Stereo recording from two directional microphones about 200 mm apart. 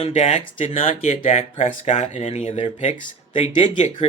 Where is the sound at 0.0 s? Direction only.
35° left (ahead or behind).